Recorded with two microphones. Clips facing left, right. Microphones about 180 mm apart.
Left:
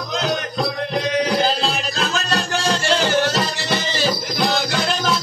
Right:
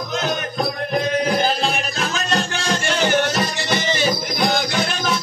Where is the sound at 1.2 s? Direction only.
60° right (ahead or behind).